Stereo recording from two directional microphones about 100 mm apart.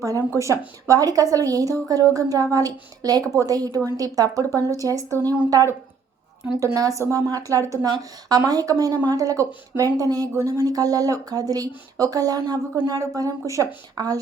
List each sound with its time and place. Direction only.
0.0 s a woman's voice: 35° right (ahead or behind)
6.6 s a woman's voice: 35° right (ahead or behind)